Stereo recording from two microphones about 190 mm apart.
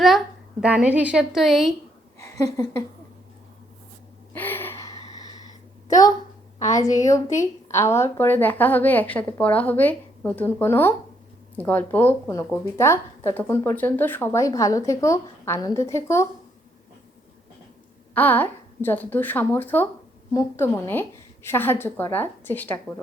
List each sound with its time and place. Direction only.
0.6 s a woman's voice: 5° right (ahead or behind)
2.1 s a sound: 15° left (ahead or behind)
4.4 s gasp: 10° left (ahead or behind)
6.6 s speech: 20° left (ahead or behind)
18.1 s speech: 10° left (ahead or behind)